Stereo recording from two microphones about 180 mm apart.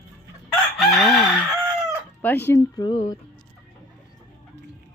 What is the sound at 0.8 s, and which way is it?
Chicken, centre (ahead or behind).